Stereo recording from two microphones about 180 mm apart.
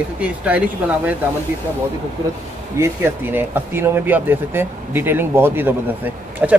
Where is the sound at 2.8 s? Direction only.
15° right (ahead or behind).